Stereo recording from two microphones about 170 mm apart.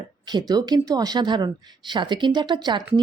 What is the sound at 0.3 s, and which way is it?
A woman's voice, 25° right (ahead or behind).